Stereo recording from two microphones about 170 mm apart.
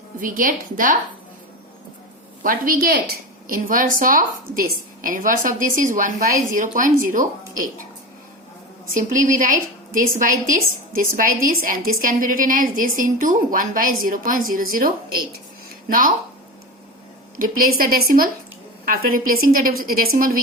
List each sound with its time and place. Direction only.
0.2 s a woman's voice: 55° right (ahead or behind)
2.4 s a woman's voice: 55° right (ahead or behind)
9.0 s a woman's voice: 50° right (ahead or behind)
17.3 s a woman's voice: 55° right (ahead or behind)